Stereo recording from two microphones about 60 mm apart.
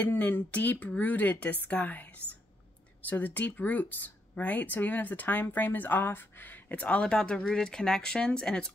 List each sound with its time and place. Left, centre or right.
0.0 s speech: left